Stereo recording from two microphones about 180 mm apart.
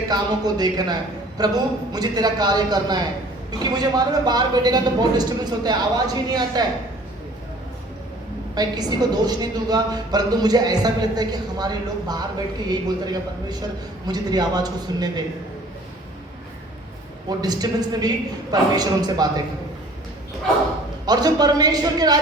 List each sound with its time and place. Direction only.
0.1 s a woman's voice: 20° right (ahead or behind)
8.5 s a woman's voice: 20° right (ahead or behind)
17.2 s a woman's voice: 20° right (ahead or behind)
21.1 s a woman's voice: 20° right (ahead or behind)